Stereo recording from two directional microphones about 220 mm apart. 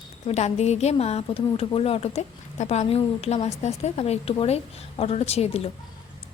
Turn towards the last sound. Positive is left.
turn(degrees=30)  # may be behind; listen again after turning